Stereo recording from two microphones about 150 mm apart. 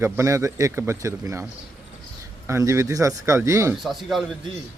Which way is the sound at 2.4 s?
20° right (ahead or behind).